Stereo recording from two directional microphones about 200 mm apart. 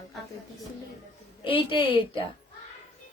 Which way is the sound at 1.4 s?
25° left (ahead or behind).